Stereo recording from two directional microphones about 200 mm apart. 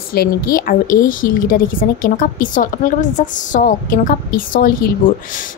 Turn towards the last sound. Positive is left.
turn(degrees=45)  # may be behind; listen again after turning